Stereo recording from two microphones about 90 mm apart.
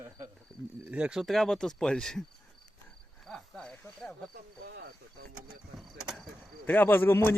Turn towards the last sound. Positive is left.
turn(degrees=25)  # may be behind; listen again after turning